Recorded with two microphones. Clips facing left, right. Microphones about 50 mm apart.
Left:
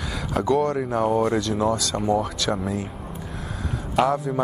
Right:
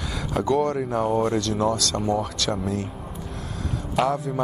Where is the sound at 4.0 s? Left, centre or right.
Centre.